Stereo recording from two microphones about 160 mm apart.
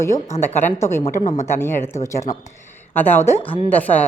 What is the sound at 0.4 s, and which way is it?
A woman's voice, 15° left (ahead or behind).